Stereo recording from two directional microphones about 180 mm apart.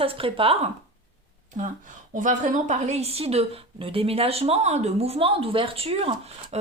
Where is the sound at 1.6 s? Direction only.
40° right (ahead or behind).